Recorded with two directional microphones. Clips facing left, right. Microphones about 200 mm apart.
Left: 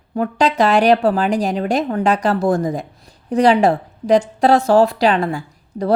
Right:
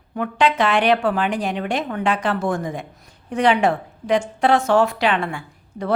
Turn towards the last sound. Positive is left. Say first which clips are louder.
# left 6 dB
turn(degrees=35)  # may be behind; listen again after turning